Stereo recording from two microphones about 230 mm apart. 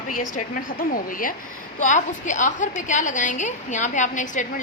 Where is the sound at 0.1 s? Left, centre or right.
Left.